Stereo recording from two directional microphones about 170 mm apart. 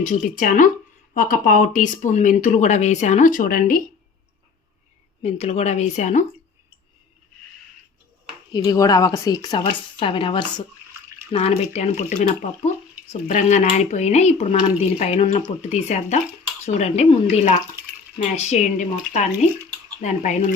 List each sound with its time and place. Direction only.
0.0 s speech: 50° left (ahead or behind)
5.2 s speech: 40° left (ahead or behind)
8.5 s speech: 20° left (ahead or behind); by 20.4 s 45° left (ahead or behind)